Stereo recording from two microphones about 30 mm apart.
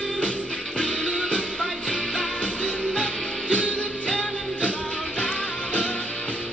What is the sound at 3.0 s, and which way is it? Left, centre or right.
Music, left.